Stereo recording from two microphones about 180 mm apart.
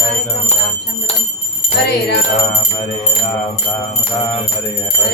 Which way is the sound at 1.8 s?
70° left (ahead or behind).